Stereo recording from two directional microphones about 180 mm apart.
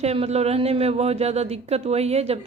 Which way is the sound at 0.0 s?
35° right (ahead or behind).